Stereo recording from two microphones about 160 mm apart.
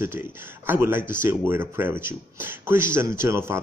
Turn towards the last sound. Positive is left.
turn(degrees=-15)  # may be behind; listen again after turning